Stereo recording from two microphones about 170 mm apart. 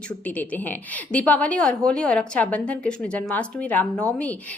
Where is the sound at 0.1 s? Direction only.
10° left (ahead or behind).